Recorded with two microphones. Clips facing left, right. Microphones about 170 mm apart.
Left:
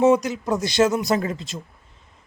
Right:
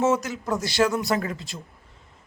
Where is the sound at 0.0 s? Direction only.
15° left (ahead or behind).